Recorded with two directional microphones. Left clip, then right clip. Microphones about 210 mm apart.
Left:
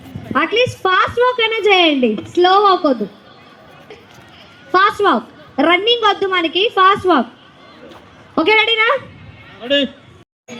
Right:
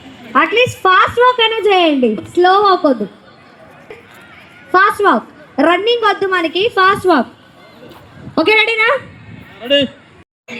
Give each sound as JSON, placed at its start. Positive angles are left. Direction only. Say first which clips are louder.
{"t": 0.3, "sound": "a woman's voice", "louder": "right 3 dB", "side_deg": -30}
{"t": 4.7, "sound": "a woman's voice", "louder": "right 2 dB", "side_deg": -30}
{"t": 8.4, "sound": "a woman's voice", "louder": "right 1 dB", "side_deg": -35}